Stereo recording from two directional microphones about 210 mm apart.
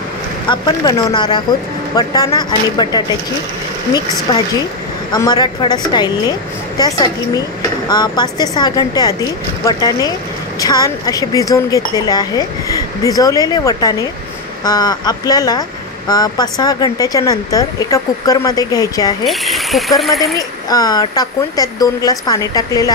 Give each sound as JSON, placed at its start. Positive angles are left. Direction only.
{"t": 0.5, "sound": "speech", "side_deg": 20}
{"t": 4.3, "sound": "speech", "side_deg": 20}
{"t": 19.2, "sound": "speech", "side_deg": 0}
{"t": 20.3, "sound": "speech", "side_deg": 15}